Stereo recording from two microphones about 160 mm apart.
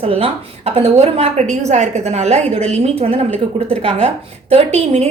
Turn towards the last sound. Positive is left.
turn(degrees=-45)  # may be behind; listen again after turning